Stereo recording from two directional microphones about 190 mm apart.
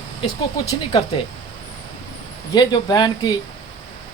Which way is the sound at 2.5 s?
20° left (ahead or behind).